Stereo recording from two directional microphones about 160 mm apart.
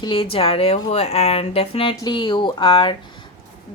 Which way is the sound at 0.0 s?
35° left (ahead or behind).